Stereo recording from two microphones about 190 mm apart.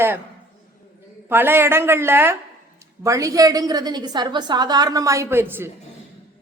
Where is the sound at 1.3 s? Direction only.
10° right (ahead or behind).